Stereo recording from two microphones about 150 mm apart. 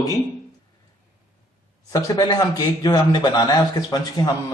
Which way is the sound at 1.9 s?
25° left (ahead or behind).